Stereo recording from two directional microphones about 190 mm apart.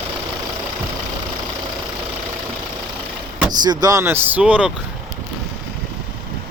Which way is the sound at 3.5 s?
20° right (ahead or behind).